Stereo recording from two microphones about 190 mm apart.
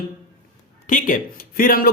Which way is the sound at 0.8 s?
45° left (ahead or behind).